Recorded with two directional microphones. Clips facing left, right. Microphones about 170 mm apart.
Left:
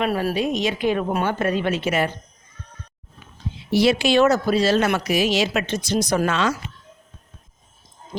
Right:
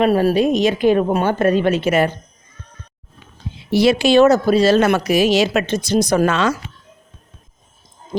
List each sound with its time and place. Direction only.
0.0 s a woman's voice: 30° right (ahead or behind)
3.8 s speech: 50° right (ahead or behind)
4.0 s a woman's voice: 30° right (ahead or behind)
4.4 s a woman's voice: 40° right (ahead or behind)
6.1 s speech: 55° right (ahead or behind)